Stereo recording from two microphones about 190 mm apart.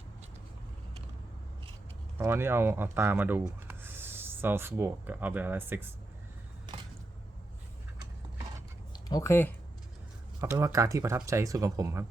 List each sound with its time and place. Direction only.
2.1 s speech: 15° right (ahead or behind)
9.0 s speech: 15° left (ahead or behind)
10.4 s speech: 15° right (ahead or behind)